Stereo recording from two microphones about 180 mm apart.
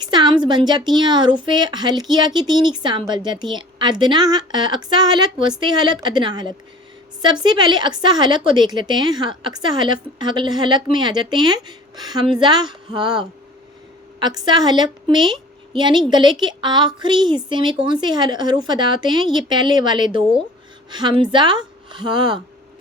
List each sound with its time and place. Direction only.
0.0 s a woman's voice: 25° right (ahead or behind)